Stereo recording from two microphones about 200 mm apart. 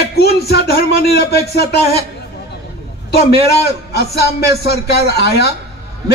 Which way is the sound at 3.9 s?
55° left (ahead or behind).